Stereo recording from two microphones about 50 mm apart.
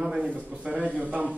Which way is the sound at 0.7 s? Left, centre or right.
Right.